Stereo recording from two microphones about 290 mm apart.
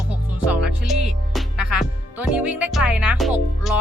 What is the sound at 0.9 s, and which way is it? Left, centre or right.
Music, centre.